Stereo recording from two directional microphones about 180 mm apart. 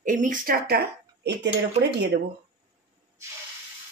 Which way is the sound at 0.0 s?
45° right (ahead or behind).